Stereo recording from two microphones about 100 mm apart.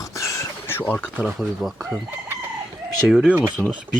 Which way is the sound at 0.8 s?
20° left (ahead or behind).